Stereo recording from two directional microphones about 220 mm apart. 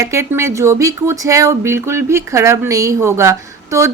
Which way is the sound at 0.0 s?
15° right (ahead or behind).